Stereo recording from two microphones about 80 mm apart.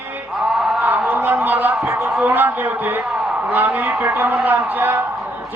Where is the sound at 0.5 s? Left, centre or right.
Centre.